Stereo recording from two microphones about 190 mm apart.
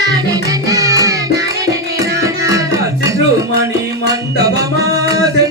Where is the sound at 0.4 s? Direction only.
15° right (ahead or behind).